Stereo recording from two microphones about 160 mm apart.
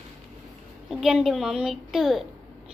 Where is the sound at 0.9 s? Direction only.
Centre (ahead or behind).